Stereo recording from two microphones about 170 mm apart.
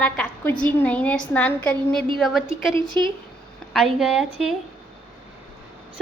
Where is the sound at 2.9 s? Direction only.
10° left (ahead or behind).